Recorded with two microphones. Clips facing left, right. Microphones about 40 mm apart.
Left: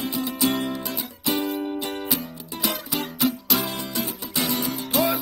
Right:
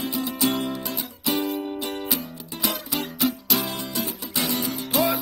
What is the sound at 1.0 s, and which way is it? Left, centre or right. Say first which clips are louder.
Music: even; centre.